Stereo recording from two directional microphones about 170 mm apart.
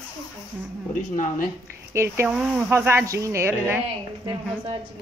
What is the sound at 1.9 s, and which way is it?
Speech, 15° right (ahead or behind).